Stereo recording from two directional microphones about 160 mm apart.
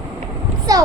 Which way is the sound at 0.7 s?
20° right (ahead or behind).